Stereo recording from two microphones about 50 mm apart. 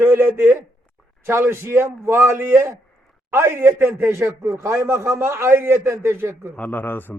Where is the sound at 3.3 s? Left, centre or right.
Right.